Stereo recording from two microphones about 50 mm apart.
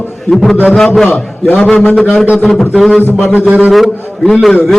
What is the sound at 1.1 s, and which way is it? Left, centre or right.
Speech, left.